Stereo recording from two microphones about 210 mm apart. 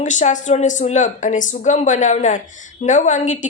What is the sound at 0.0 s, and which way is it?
Speech, 35° left (ahead or behind).